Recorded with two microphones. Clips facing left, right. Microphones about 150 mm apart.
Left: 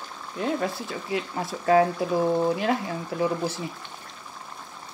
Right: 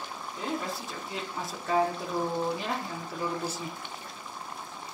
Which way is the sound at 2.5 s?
90° left.